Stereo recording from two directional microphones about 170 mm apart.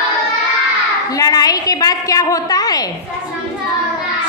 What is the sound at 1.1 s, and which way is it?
A woman's voice, 20° left (ahead or behind).